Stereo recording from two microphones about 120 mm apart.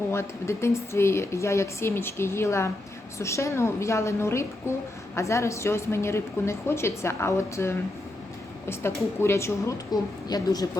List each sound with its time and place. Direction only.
0.1 s a woman's voice: 20° left (ahead or behind)